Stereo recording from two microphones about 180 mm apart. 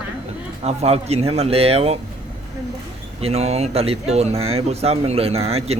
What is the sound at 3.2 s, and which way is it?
Speech, 35° right (ahead or behind).